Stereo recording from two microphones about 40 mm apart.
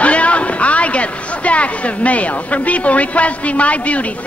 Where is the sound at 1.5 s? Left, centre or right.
Left.